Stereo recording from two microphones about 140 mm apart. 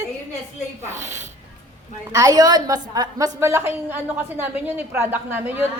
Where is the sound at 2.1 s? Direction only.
25° right (ahead or behind).